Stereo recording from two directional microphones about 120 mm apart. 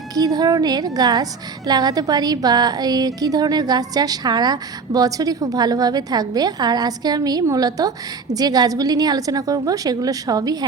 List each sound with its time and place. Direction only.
0.1 s a woman's voice: 30° right (ahead or behind)